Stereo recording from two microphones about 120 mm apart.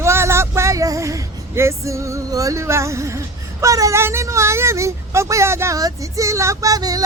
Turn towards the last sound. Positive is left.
turn(degrees=-30)  # may be behind; listen again after turning